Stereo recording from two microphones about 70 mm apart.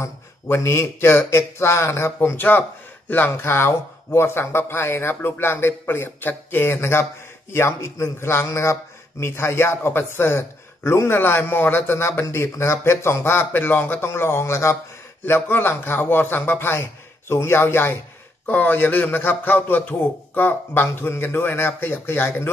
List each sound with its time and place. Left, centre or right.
0.0 s a man's voice: left
2.1 s a man's voice: left
15.2 s a man's voice: left